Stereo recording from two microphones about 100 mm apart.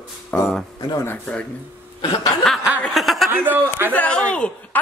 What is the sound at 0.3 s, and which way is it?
Speech, 15° left (ahead or behind).